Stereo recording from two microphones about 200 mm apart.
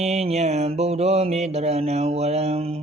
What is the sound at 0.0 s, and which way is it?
Mantra, 30° right (ahead or behind).